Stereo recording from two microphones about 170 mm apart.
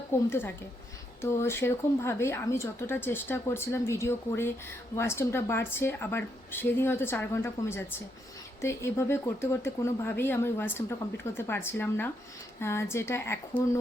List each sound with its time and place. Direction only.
0.3 s speech: 15° left (ahead or behind)